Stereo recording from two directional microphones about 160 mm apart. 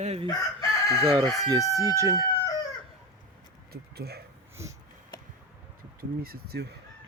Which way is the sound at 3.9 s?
85° right.